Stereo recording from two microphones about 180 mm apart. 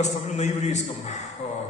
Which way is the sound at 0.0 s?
40° left (ahead or behind).